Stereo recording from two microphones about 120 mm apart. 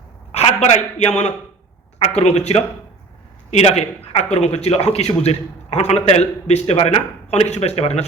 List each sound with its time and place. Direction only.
0.3 s a man's voice: 65° left (ahead or behind)